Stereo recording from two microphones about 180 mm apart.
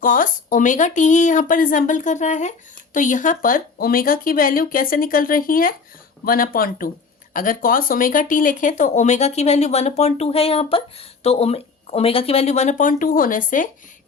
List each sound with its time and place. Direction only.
0.0 s speech: 50° left (ahead or behind)